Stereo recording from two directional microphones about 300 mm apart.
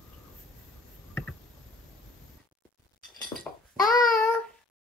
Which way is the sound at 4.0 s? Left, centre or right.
Centre.